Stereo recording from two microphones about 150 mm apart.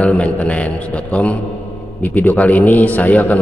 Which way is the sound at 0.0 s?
10° left (ahead or behind).